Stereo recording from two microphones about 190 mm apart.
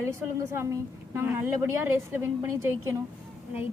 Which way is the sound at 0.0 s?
15° right (ahead or behind).